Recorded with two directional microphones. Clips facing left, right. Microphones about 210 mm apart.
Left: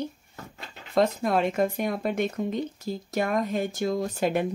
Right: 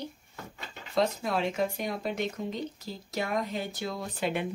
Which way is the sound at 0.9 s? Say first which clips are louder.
Left 5 dB; 55° left (ahead or behind).